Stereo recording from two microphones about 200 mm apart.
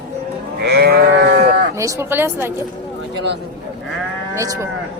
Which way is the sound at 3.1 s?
55° right (ahead or behind).